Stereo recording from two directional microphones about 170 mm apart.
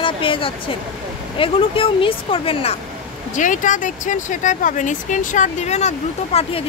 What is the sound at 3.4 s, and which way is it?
Speech, 50° left (ahead or behind).